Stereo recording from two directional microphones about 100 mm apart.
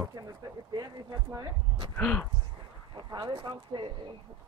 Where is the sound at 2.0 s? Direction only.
15° left (ahead or behind).